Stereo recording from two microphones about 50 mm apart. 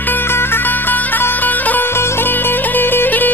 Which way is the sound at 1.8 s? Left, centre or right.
Left.